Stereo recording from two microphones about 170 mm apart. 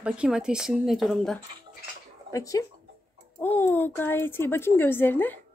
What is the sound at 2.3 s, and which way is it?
A woman's voice, 20° left (ahead or behind).